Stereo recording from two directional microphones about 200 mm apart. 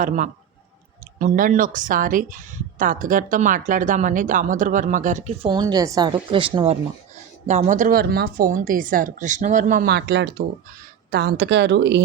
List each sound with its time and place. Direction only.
1.2 s a woman's voice: 45° right (ahead or behind)
5.5 s a woman's voice: 20° right (ahead or behind)
7.4 s a woman's voice: 35° right (ahead or behind); by 12.0 s 60° right (ahead or behind)